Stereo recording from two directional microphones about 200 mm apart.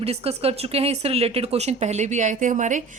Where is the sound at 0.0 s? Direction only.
30° right (ahead or behind).